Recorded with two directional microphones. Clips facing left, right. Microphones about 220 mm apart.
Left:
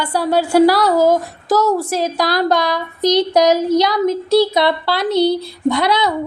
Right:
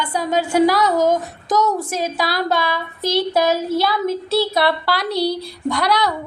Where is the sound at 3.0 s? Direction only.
15° left (ahead or behind).